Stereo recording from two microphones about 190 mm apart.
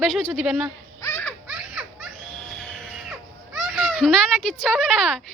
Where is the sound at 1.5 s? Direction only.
Centre (ahead or behind).